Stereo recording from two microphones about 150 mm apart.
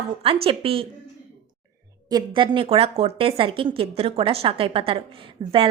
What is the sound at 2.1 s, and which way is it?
A woman's voice, 35° right (ahead or behind).